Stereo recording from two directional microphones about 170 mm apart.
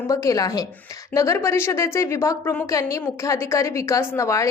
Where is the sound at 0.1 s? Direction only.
20° left (ahead or behind).